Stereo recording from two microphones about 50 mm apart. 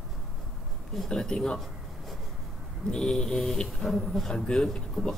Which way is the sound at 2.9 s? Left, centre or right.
Centre.